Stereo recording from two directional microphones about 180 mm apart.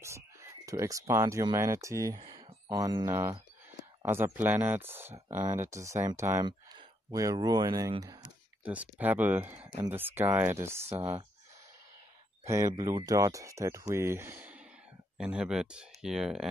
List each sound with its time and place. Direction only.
0.0 s speech: 15° right (ahead or behind)
8.6 s speech: 10° right (ahead or behind)
12.4 s speech: 15° right (ahead or behind)